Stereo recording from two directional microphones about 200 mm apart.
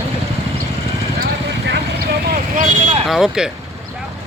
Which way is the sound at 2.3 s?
40° right (ahead or behind).